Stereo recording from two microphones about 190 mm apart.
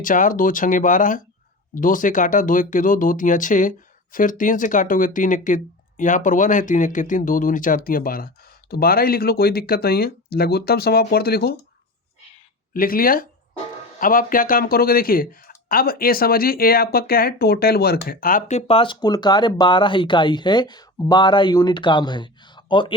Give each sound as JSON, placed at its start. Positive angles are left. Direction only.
{"t": 0.0, "sound": "speech", "side_deg": 45}
{"t": 12.7, "sound": "speech", "side_deg": 50}